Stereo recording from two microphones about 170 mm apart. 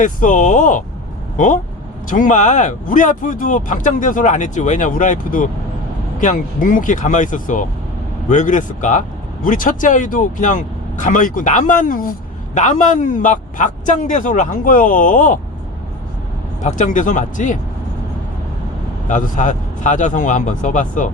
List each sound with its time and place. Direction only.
0.0 s speech: 50° left (ahead or behind)
2.0 s speech: 50° left (ahead or behind)
12.5 s speech: 45° left (ahead or behind)
16.6 s speech: 45° left (ahead or behind)
19.0 s speech: 45° left (ahead or behind)